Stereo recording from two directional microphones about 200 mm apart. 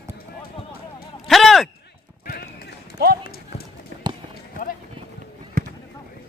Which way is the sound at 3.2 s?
50° left (ahead or behind).